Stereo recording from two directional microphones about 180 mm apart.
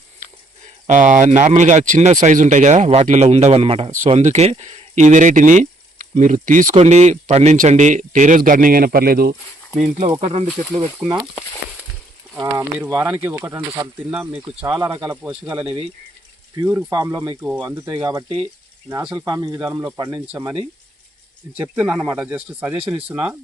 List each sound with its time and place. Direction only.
0.9 s speech: 40° right (ahead or behind)
9.7 s speech: 40° right (ahead or behind)
10.8 s speech: 20° right (ahead or behind)
12.3 s speech: 15° right (ahead or behind)
15.6 s speech: 30° right (ahead or behind)
16.6 s speech: 15° right (ahead or behind)
21.8 s speech: 5° right (ahead or behind)